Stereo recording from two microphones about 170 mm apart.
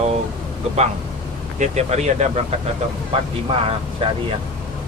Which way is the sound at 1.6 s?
40° right (ahead or behind).